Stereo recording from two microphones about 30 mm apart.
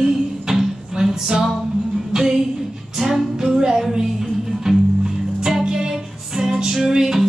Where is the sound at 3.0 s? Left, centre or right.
Centre.